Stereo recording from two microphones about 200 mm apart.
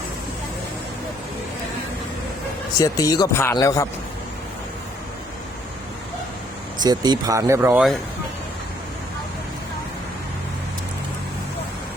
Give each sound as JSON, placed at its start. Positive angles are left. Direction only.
{"t": 2.7, "sound": "speech", "side_deg": 15}
{"t": 6.7, "sound": "speech", "side_deg": -20}